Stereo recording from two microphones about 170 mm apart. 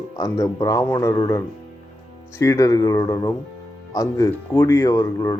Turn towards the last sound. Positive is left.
turn(degrees=15)  # may be behind; listen again after turning